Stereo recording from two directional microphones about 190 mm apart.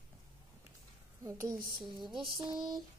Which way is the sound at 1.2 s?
15° right (ahead or behind).